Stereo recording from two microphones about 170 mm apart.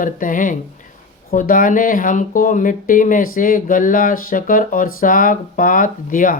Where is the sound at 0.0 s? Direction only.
50° left (ahead or behind).